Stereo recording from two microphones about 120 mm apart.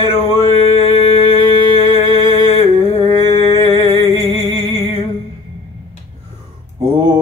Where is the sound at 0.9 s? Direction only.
40° right (ahead or behind).